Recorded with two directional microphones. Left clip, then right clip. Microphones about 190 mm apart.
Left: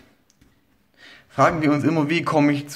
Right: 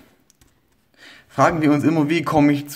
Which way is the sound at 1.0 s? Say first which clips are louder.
Right 1 dB; 20° right (ahead or behind).